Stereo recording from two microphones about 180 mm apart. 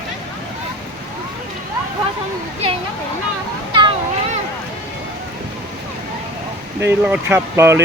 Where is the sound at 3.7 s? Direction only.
25° right (ahead or behind).